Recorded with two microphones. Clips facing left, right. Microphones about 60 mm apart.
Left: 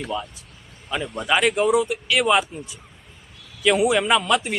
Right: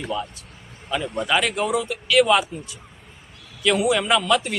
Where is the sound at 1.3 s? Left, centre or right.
Centre.